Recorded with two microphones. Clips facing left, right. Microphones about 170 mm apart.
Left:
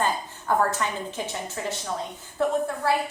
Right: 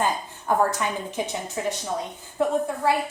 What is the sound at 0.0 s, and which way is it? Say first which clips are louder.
A woman's voice: right 1 dB; 15° right (ahead or behind).